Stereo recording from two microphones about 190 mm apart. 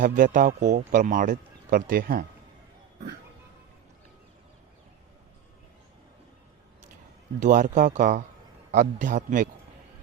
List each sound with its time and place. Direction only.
0.0 s speech: 45° right (ahead or behind)
7.4 s speech: 40° right (ahead or behind)